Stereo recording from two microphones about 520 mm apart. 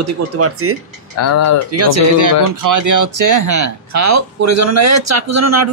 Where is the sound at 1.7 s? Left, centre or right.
Right.